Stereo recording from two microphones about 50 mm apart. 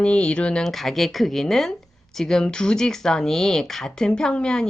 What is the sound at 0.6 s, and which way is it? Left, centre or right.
Speech, centre.